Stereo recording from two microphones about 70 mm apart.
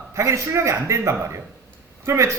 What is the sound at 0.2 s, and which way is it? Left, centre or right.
A man's voice, right.